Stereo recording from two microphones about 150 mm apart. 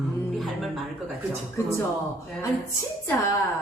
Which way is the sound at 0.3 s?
Centre (ahead or behind).